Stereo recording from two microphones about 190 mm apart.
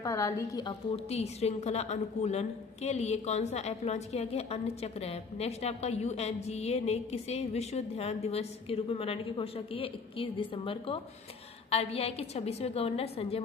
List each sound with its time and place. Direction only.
0.0 s a woman's voice: 15° left (ahead or behind); by 13.4 s 30° left (ahead or behind)